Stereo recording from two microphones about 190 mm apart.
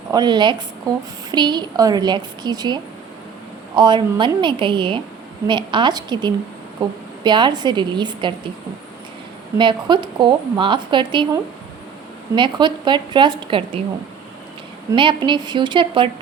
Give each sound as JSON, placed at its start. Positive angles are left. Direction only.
{"t": 0.1, "sound": "a woman's voice", "side_deg": -20}
{"t": 9.6, "sound": "a woman's voice", "side_deg": -25}
{"t": 14.9, "sound": "a woman's voice", "side_deg": -25}